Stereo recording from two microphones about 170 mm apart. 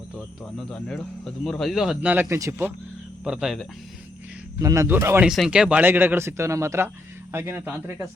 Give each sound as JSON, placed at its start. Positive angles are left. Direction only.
{"t": 0.7, "sound": "speech", "side_deg": 5}
{"t": 4.6, "sound": "speech", "side_deg": -20}
{"t": 5.3, "sound": "speech", "side_deg": -5}